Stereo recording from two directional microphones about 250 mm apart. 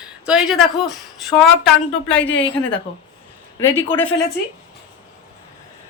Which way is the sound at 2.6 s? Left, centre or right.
Centre.